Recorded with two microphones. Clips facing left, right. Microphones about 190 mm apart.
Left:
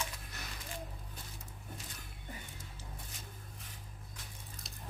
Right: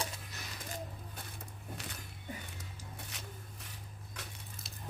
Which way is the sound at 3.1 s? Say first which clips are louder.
Right 3 dB; 75° right (ahead or behind).